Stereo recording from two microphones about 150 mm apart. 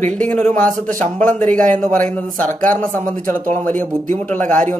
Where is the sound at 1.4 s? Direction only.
60° right (ahead or behind).